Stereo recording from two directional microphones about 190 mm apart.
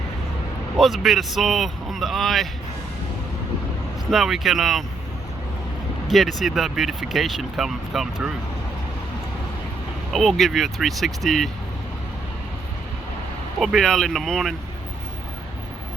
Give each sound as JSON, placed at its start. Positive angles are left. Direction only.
{"t": 0.8, "sound": "speech", "side_deg": 0}
{"t": 4.1, "sound": "speech", "side_deg": 0}
{"t": 6.1, "sound": "speech", "side_deg": 0}
{"t": 10.1, "sound": "speech", "side_deg": 0}
{"t": 13.6, "sound": "speech", "side_deg": 0}